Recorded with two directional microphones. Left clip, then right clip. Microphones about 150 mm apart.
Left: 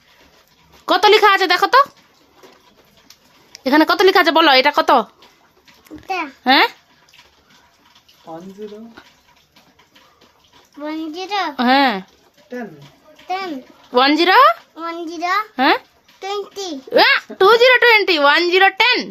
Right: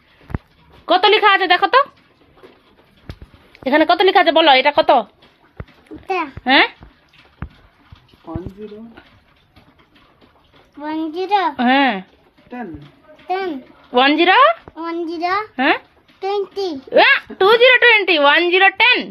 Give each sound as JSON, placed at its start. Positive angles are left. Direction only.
{"t": 0.9, "sound": "a woman's voice", "side_deg": 45}
{"t": 3.6, "sound": "speech", "side_deg": 50}
{"t": 5.9, "sound": "a sound", "side_deg": 15}
{"t": 6.4, "sound": "a woman's voice", "side_deg": 40}
{"t": 10.8, "sound": "a child's voice", "side_deg": 30}
{"t": 13.2, "sound": "a child's voice", "side_deg": 30}
{"t": 14.8, "sound": "a woman's voice", "side_deg": 35}